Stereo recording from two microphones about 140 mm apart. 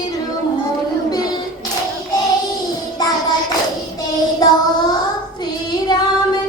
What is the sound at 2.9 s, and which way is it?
Child singing, 30° left (ahead or behind).